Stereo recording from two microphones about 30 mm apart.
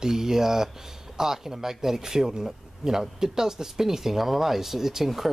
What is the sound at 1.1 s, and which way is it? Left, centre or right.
Speech, centre.